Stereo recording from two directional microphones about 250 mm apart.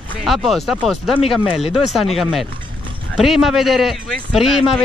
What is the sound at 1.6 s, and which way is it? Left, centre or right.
Speech, left.